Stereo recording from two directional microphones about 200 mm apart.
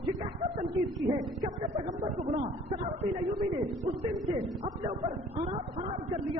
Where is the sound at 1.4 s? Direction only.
40° right (ahead or behind).